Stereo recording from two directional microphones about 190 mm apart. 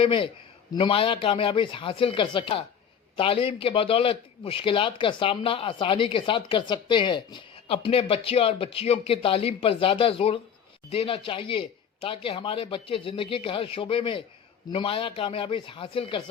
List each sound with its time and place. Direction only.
0.0 s a man's voice: 30° left (ahead or behind)